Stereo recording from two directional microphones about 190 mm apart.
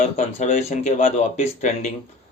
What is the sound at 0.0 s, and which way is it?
Speech, 40° left (ahead or behind).